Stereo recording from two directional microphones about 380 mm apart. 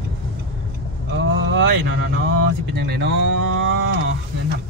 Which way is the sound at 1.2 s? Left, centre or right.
Right.